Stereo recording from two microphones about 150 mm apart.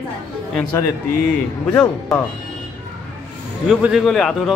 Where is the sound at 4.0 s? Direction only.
5° left (ahead or behind).